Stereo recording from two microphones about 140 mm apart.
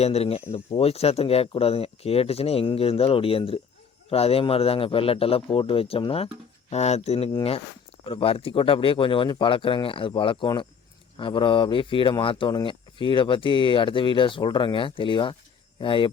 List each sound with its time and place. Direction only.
0.0 s speech: 50° left (ahead or behind)